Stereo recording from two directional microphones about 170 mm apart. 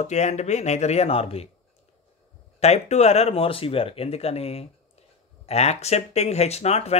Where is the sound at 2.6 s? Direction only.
40° left (ahead or behind).